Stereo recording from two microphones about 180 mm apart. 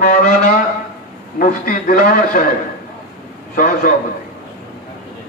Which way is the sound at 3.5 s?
50° left (ahead or behind).